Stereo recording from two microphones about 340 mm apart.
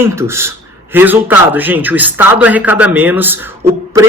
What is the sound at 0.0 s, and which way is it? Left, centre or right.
Speech, centre.